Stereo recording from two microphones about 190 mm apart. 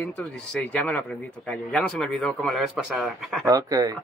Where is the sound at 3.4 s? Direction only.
15° right (ahead or behind).